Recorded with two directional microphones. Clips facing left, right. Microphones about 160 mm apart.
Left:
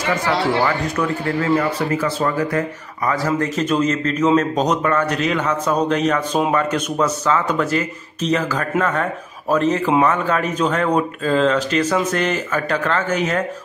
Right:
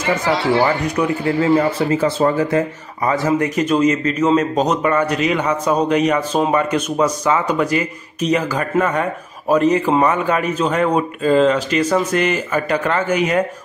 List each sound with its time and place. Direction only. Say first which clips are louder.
0.7 s speech: right 2 dB; 15° right (ahead or behind)